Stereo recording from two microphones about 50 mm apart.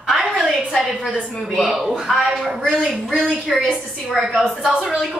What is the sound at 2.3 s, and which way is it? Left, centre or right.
A woman's voice, centre.